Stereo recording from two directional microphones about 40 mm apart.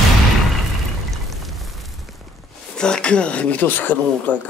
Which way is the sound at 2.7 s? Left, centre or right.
Left.